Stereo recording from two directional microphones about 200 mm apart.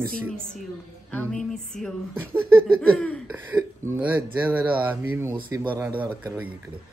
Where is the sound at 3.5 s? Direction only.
10° right (ahead or behind).